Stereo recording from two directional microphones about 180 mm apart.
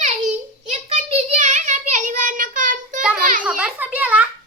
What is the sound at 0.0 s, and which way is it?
Child singing, 40° right (ahead or behind).